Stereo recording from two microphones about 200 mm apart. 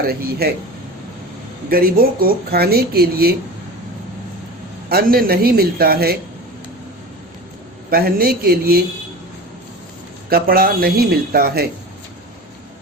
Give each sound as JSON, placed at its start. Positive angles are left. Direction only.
{"t": 0.0, "sound": "speech", "side_deg": -50}
{"t": 1.7, "sound": "speech", "side_deg": -45}
{"t": 4.9, "sound": "speech", "side_deg": -50}
{"t": 7.9, "sound": "speech", "side_deg": -50}
{"t": 10.2, "sound": "speech", "side_deg": -50}